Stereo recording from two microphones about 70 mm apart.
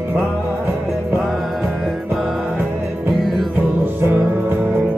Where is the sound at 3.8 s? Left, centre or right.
Right.